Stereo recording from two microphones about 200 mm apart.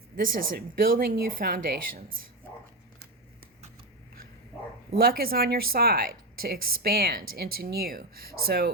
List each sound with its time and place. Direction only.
0.2 s a woman's voice: 45° right (ahead or behind)
4.9 s a woman's voice: 50° right (ahead or behind)